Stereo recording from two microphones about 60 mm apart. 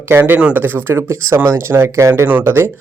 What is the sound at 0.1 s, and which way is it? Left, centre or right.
Speech, right.